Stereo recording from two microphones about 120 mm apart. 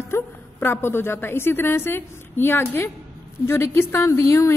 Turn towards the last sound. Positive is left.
turn(degrees=25)  # may be behind; listen again after turning